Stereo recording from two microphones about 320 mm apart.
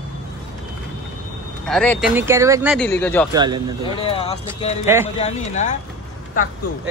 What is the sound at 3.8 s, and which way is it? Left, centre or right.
Speech, centre.